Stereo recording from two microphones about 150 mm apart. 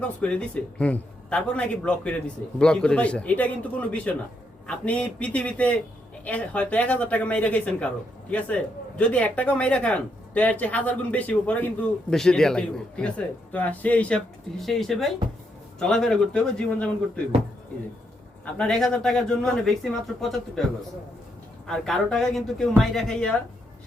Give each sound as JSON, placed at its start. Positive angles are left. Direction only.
{"t": 0.2, "sound": "a man's voice", "side_deg": 10}
{"t": 18.5, "sound": "speech", "side_deg": 5}
{"t": 21.7, "sound": "speech", "side_deg": 0}